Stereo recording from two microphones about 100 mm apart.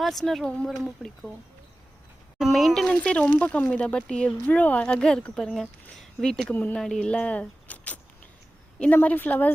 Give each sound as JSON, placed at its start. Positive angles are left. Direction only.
{"t": 0.0, "sound": "speech", "side_deg": 5}
{"t": 2.4, "sound": "speech", "side_deg": 0}
{"t": 6.5, "sound": "speech", "side_deg": 20}
{"t": 6.7, "sound": "speech", "side_deg": 5}